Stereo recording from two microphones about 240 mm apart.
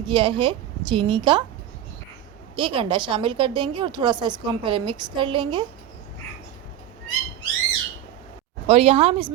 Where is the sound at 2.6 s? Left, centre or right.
Right.